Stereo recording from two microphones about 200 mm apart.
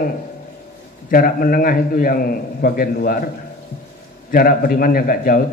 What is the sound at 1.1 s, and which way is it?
A man's voice, 45° left (ahead or behind).